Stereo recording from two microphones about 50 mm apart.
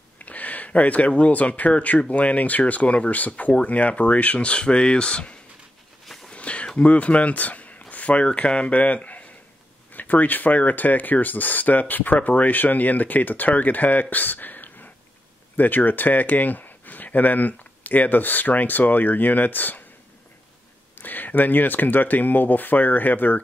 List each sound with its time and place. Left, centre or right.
0.2 s speech: left
6.3 s a sound: left
6.8 s speech: left
21.0 s speech: left